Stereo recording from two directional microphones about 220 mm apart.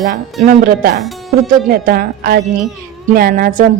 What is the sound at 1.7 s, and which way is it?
Music, 40° right (ahead or behind).